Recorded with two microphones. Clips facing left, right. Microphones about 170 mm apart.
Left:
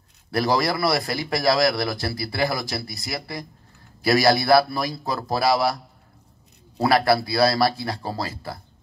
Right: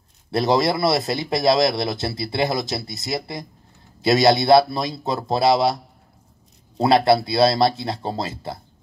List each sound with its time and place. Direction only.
0.3 s a man's voice: 25° right (ahead or behind)
6.8 s a man's voice: 25° right (ahead or behind)